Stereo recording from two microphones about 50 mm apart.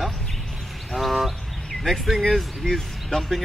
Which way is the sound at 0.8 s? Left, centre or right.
Centre.